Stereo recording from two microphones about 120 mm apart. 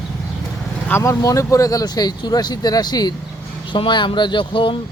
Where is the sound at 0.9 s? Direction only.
25° left (ahead or behind); by 4.8 s 45° left (ahead or behind).